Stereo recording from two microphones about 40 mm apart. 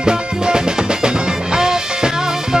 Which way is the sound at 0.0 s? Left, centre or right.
Right.